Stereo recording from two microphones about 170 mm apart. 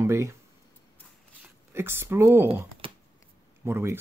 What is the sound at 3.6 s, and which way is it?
Speech, 15° right (ahead or behind).